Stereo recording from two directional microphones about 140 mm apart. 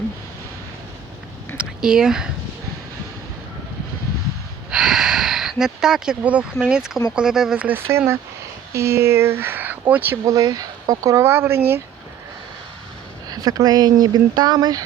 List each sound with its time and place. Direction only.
1.5 s speech: 5° right (ahead or behind)
4.7 s speech: 5° right (ahead or behind)
10.2 s speech: 25° right (ahead or behind)
13.3 s speech: 25° right (ahead or behind)